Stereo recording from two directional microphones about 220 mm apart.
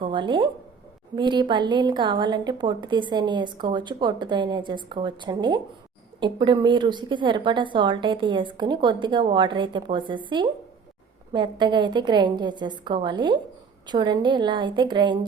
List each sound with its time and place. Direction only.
0.0 s a woman's voice: 20° right (ahead or behind)